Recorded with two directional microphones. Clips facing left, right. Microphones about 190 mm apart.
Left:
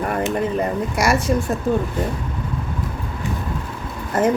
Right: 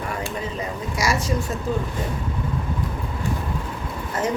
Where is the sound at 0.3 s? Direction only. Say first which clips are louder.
Left 8 dB; 60° left (ahead or behind).